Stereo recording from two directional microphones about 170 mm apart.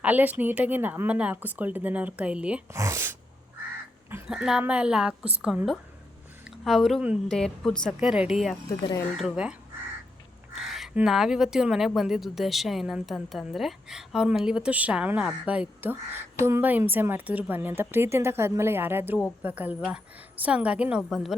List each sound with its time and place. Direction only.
0.0 s a woman's voice: 10° right (ahead or behind)
10.6 s a woman's voice: centre (ahead or behind)